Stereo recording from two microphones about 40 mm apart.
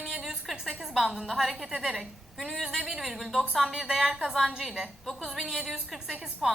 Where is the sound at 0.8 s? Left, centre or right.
Centre.